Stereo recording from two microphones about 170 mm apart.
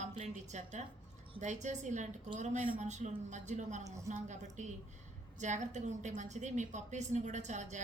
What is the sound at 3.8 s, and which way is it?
Speech, 20° right (ahead or behind).